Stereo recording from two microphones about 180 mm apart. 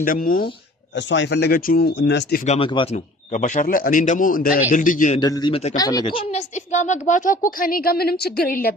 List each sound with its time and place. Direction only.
0.0 s speech: 50° left (ahead or behind)
0.9 s speech: 90° left; by 2.4 s 70° left (ahead or behind)
2.6 s speech: 30° left (ahead or behind)
2.9 s speech: 45° left (ahead or behind)
5.2 s speech: 25° left (ahead or behind); by 8.7 s 55° left (ahead or behind)